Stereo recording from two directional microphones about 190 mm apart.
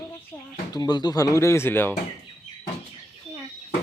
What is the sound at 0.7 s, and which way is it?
Speech, 20° left (ahead or behind).